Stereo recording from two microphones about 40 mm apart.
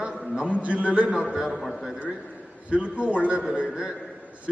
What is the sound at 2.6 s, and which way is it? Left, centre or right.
Speech, right.